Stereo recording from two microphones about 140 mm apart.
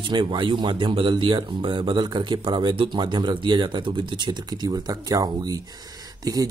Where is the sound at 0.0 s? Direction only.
35° right (ahead or behind).